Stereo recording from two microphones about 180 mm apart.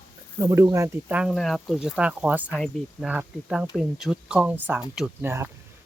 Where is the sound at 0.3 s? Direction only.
15° right (ahead or behind).